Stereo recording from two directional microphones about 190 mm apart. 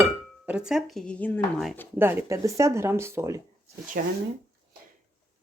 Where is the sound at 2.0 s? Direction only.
10° right (ahead or behind).